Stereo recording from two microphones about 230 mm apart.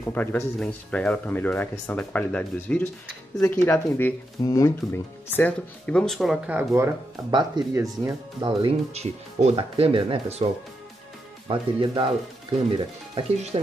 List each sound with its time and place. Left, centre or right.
0.0 s speech: centre; by 13.6 s right